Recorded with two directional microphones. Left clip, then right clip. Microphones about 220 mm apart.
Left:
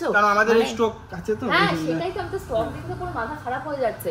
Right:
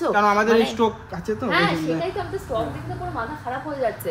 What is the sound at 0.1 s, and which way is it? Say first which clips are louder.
Speech: left 1 dB; 45° right (ahead or behind).